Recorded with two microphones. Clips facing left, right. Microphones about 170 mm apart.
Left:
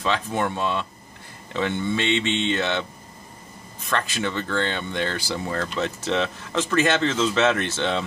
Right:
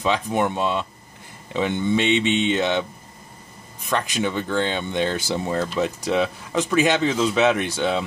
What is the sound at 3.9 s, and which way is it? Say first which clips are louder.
Speech: right 3 dB; 15° right (ahead or behind).